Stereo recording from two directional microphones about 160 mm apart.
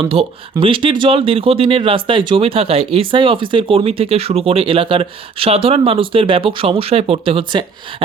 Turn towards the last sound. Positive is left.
turn(degrees=-30)  # may be behind; listen again after turning